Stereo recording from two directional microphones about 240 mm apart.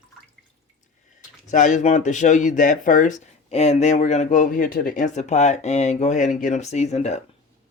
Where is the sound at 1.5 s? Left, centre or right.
Left.